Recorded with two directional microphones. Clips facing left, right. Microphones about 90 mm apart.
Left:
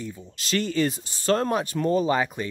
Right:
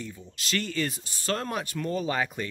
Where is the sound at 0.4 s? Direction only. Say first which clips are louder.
Left 6 dB; 25° left (ahead or behind).